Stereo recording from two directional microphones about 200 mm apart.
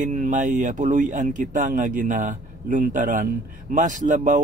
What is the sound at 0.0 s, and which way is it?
Speech, 40° right (ahead or behind).